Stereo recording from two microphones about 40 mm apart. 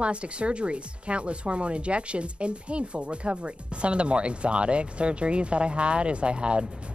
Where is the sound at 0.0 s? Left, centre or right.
Right.